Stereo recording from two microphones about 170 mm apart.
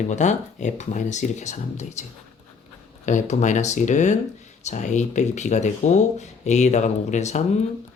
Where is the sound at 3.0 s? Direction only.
45° left (ahead or behind).